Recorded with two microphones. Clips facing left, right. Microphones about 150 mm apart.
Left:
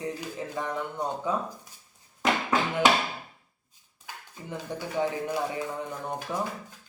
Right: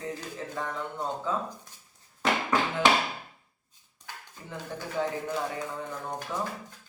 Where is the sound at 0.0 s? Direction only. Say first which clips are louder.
Left 2 dB; 15° left (ahead or behind).